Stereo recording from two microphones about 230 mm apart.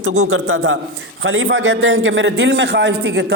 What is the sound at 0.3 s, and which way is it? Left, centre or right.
A man's voice, right.